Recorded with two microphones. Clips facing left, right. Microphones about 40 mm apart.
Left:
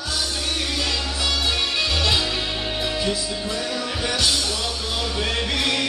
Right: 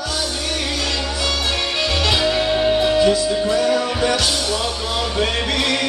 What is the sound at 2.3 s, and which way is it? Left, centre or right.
Music, centre.